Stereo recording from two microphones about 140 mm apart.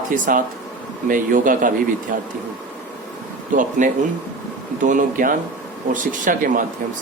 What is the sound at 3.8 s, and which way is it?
Speech, 65° right (ahead or behind).